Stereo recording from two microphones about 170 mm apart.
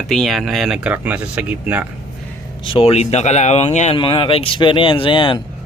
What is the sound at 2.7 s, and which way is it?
Speech, 35° left (ahead or behind).